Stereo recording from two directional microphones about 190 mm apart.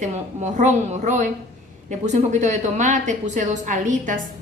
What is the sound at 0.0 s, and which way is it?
A woman's voice, 40° right (ahead or behind).